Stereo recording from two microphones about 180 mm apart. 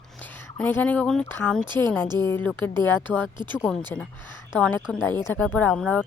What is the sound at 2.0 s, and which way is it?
Speech, 25° right (ahead or behind).